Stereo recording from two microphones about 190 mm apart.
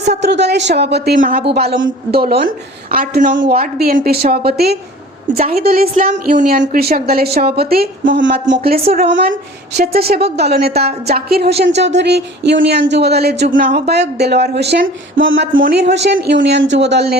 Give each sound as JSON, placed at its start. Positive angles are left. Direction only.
{"t": 0.1, "sound": "a woman's voice", "side_deg": -65}
{"t": 5.4, "sound": "a woman's voice", "side_deg": -35}
{"t": 5.6, "sound": "a woman's voice", "side_deg": -55}
{"t": 8.4, "sound": "a woman's voice", "side_deg": -50}
{"t": 8.9, "sound": "speech", "side_deg": -65}
{"t": 15.6, "sound": "speech", "side_deg": -60}